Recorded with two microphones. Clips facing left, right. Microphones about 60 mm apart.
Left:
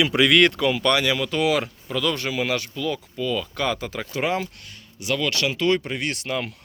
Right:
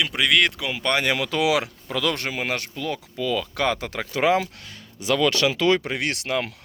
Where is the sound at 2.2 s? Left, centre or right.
Right.